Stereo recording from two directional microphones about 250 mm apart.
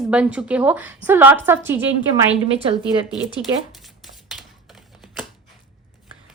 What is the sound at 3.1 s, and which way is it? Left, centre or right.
Speech, centre.